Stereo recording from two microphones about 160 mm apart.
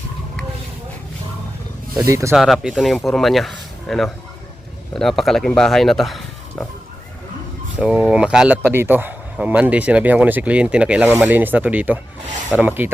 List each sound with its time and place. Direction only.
2.0 s speech: 20° right (ahead or behind)
2.3 s speech: centre (ahead or behind)
7.8 s speech: 5° right (ahead or behind)